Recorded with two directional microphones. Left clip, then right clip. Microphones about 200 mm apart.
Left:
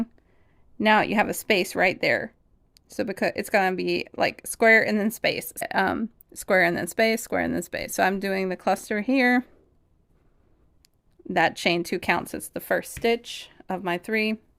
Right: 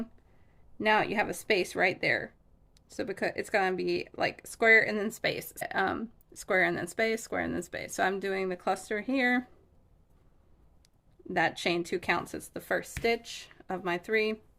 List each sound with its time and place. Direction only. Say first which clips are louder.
0.8 s speech: left 6 dB; 40° left (ahead or behind)
10.8 s speech: left 6 dB; 40° left (ahead or behind)